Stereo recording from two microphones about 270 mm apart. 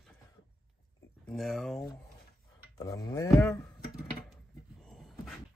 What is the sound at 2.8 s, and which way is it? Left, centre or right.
Livestock, centre.